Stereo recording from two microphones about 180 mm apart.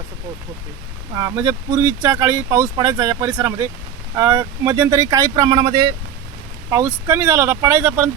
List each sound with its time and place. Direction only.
1.1 s speech: 20° right (ahead or behind)